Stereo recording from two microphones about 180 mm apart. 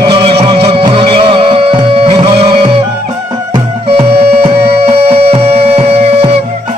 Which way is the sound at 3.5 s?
35° right (ahead or behind).